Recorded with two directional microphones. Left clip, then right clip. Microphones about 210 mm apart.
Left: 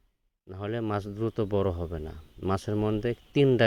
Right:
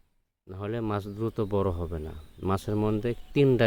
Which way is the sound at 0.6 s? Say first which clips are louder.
Even; 25° left (ahead or behind).